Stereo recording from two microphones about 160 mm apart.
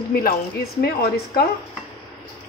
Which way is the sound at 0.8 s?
80° left.